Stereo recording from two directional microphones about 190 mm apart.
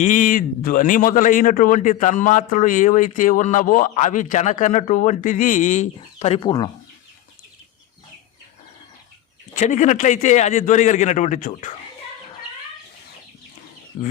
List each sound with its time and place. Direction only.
0.0 s a man's voice: 40° left (ahead or behind); by 6.7 s 25° left (ahead or behind)
9.6 s speech: 40° left (ahead or behind)
13.9 s speech: 35° left (ahead or behind)